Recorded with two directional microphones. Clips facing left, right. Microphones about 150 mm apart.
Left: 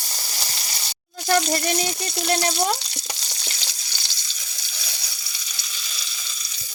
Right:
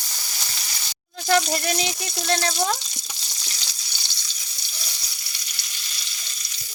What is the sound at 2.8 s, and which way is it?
Frying, 70° left (ahead or behind).